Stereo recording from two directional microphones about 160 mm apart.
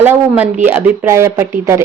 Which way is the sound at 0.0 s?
10° right (ahead or behind).